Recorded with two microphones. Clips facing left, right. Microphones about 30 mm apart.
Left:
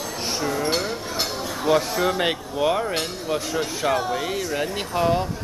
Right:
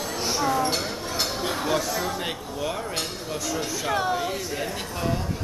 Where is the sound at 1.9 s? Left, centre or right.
Left.